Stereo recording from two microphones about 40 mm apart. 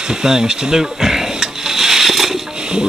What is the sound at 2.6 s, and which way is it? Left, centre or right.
Music, right.